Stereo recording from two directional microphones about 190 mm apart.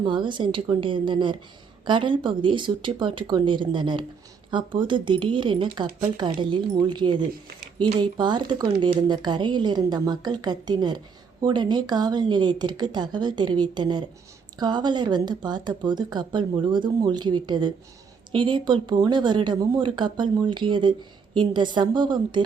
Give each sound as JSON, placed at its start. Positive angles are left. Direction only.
{"t": 0.0, "sound": "a woman's voice", "side_deg": -25}